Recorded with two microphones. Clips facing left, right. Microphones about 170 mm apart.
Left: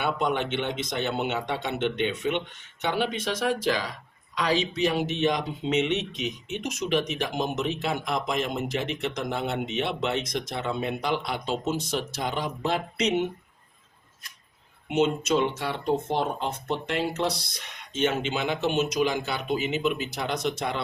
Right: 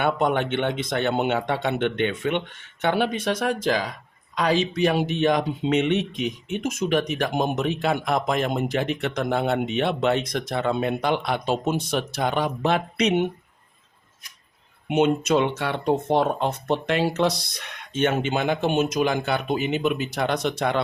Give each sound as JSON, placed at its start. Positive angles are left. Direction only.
{"t": 0.0, "sound": "speech", "side_deg": -55}
{"t": 14.8, "sound": "speech", "side_deg": -60}